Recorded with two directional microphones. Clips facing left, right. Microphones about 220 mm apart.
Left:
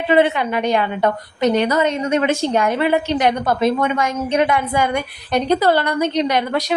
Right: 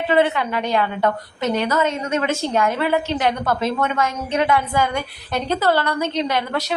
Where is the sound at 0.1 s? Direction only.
15° left (ahead or behind).